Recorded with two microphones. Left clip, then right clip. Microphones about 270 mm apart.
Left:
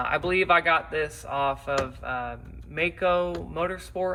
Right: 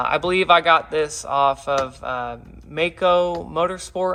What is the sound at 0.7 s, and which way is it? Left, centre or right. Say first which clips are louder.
Speech: right 7 dB; right.